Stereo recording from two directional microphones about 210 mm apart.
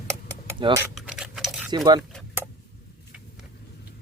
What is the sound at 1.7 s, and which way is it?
Speech, 20° right (ahead or behind).